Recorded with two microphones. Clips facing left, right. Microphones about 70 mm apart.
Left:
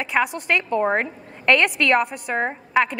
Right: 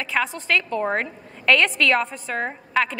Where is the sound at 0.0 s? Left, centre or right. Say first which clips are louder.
Left 3 dB; centre.